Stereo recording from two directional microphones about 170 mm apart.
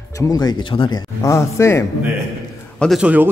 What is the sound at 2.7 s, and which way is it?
Speech, centre (ahead or behind).